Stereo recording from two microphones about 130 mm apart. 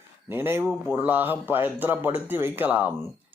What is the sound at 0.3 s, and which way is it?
A man's voice, 15° right (ahead or behind).